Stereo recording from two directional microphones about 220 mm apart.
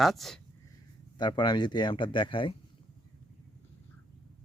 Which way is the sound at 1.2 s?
20° left (ahead or behind).